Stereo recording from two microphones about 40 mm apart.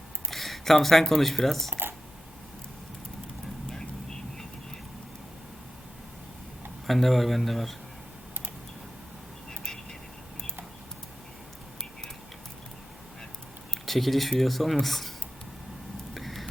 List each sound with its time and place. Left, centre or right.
0.3 s speech: centre
3.7 s vehicle: centre
6.8 s speech: centre
13.8 s speech: centre
16.1 s a sound: centre